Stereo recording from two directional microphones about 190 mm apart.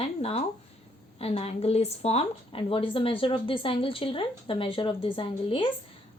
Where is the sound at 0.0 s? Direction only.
30° left (ahead or behind).